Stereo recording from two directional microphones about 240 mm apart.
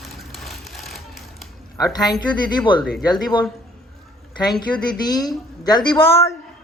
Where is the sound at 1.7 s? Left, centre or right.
Centre.